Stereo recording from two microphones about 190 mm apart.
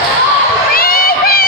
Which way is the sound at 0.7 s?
50° left (ahead or behind).